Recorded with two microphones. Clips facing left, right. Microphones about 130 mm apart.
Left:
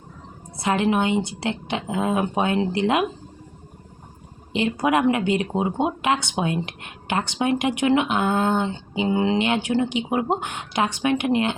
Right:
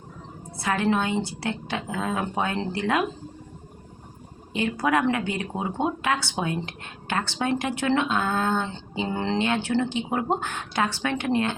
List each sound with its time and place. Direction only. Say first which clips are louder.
0.5 s a woman's voice: left 3 dB; 20° left (ahead or behind)
4.5 s speech: left 3 dB; 20° left (ahead or behind)